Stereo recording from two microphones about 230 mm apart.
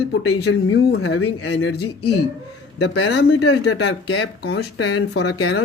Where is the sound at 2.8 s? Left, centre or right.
Left.